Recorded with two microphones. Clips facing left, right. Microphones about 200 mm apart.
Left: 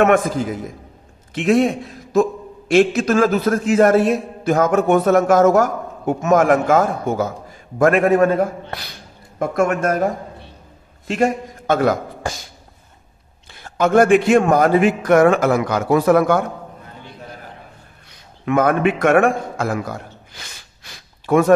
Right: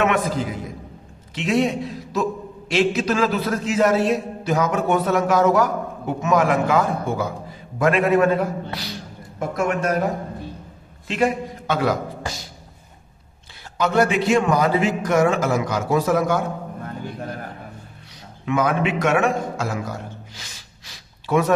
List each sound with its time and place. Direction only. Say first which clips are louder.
0.0 s a man's voice: left 5 dB; 50° left (ahead or behind)
11.1 s a man's voice: left 2 dB; 45° left (ahead or behind)
13.7 s a man's voice: left 6 dB; 50° left (ahead or behind)
18.4 s a man's voice: left 5 dB; 55° left (ahead or behind)
20.3 s gasp: left 2 dB; 55° left (ahead or behind)